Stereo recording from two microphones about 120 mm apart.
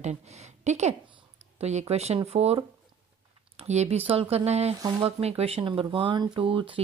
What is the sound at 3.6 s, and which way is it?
Speech, 65° right (ahead or behind).